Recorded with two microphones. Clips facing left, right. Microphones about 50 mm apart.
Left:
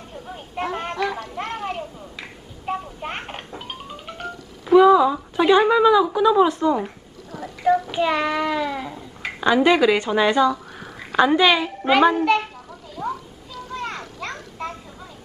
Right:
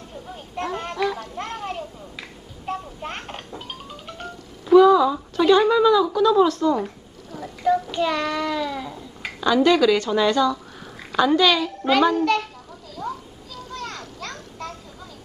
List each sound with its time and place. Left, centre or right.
0.6 s music: centre
1.3 s a sound: left
2.6 s music: centre
7.2 s child singing: left
7.9 s a child's voice: centre
13.0 s a sound: centre
13.7 s children playing: left